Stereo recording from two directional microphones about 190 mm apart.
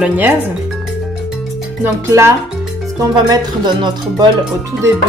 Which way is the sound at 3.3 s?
20° right (ahead or behind).